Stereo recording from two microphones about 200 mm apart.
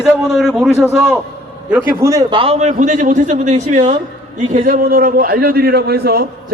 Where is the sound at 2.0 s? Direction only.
15° right (ahead or behind).